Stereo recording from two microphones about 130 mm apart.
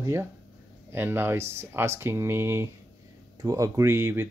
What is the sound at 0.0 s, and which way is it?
Speech, 20° right (ahead or behind).